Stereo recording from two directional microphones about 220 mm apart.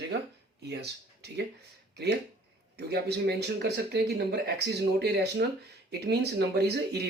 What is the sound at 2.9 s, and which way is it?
Speech, 50° right (ahead or behind).